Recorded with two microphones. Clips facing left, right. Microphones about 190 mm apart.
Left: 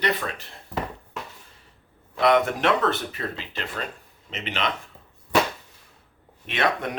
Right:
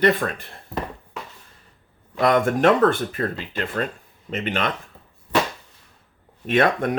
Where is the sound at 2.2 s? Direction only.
45° right (ahead or behind).